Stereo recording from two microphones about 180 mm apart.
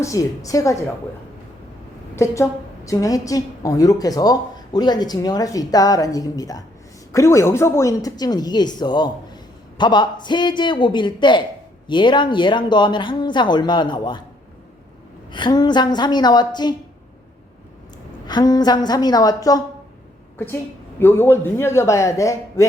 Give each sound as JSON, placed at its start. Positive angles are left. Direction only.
{"t": 0.0, "sound": "a man's voice", "side_deg": 20}
{"t": 2.1, "sound": "a woman's voice", "side_deg": 15}
{"t": 15.3, "sound": "a woman's voice", "side_deg": 25}
{"t": 18.3, "sound": "a woman's voice", "side_deg": 20}
{"t": 21.0, "sound": "a man's voice", "side_deg": 10}